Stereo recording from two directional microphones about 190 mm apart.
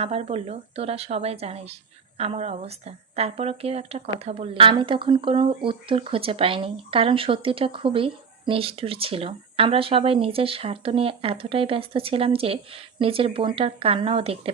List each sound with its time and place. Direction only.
0.0 s speech: 30° right (ahead or behind)